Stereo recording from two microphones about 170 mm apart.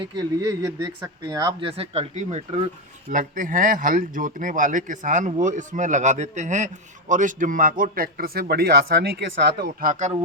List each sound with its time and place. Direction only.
0.0 s speech: 25° right (ahead or behind)
1.7 s speech: 35° right (ahead or behind)
3.1 s a man's voice: 50° right (ahead or behind); by 9.6 s 85° right
9.8 s speech: 50° right (ahead or behind)